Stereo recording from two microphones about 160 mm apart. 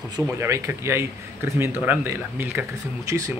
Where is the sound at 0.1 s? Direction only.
20° right (ahead or behind).